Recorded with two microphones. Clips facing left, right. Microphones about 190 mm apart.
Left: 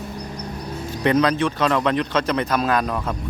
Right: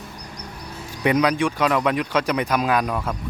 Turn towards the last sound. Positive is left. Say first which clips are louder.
# even
turn(degrees=-10)  # may be behind; listen again after turning